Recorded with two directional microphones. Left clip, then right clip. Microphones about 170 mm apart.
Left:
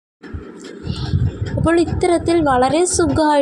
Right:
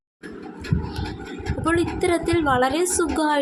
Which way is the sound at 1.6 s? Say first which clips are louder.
Left 6 dB; 30° left (ahead or behind).